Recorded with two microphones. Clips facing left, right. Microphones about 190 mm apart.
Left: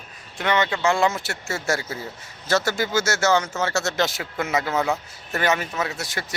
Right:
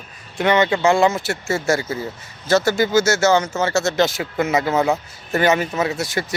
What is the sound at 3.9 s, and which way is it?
Speech, centre (ahead or behind).